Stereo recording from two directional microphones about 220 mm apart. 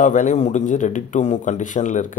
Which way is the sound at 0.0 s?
35° left (ahead or behind).